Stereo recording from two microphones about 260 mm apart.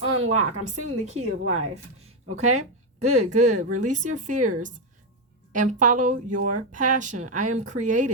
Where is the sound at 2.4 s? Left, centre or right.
Right.